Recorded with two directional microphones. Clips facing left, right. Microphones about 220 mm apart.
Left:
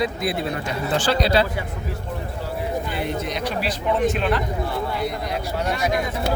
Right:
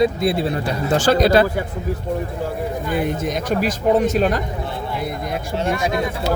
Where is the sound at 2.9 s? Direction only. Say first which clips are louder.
Right 5 dB; 45° right (ahead or behind).